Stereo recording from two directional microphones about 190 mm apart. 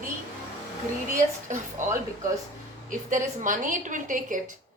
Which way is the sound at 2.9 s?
40° right (ahead or behind).